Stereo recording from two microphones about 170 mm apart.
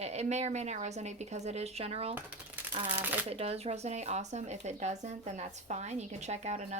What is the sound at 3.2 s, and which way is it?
Speech, 35° right (ahead or behind).